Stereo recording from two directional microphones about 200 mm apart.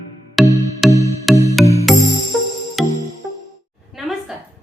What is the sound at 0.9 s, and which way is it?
Music, 15° right (ahead or behind).